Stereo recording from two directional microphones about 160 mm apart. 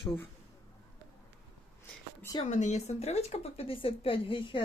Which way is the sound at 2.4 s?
45° left (ahead or behind).